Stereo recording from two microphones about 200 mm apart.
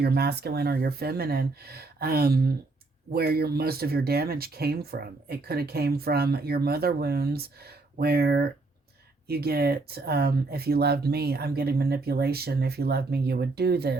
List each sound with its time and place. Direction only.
0.0 s speech: 55° right (ahead or behind)